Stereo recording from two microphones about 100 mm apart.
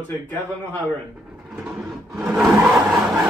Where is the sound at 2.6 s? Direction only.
25° right (ahead or behind).